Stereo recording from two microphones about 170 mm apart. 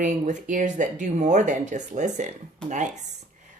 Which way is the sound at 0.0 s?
45° right (ahead or behind).